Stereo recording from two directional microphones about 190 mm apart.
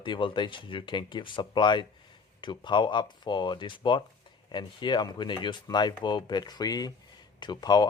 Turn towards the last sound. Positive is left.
turn(degrees=20)  # may be behind; listen again after turning